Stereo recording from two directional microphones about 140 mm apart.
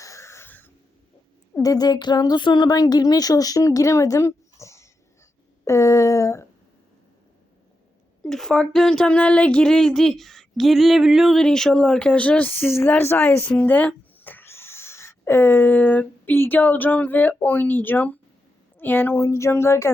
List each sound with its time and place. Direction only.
0.0 s a sound: 20° left (ahead or behind)
1.6 s speech: 30° left (ahead or behind)
8.2 s speech: 5° left (ahead or behind); by 19.9 s 20° left (ahead or behind)